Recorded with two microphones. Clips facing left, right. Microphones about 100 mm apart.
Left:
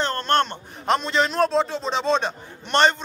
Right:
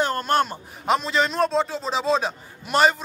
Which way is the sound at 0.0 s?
10° right (ahead or behind).